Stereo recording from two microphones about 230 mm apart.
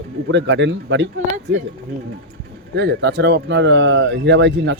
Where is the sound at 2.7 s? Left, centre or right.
Right.